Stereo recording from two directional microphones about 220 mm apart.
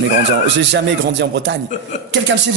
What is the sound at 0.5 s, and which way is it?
Speech, 50° right (ahead or behind).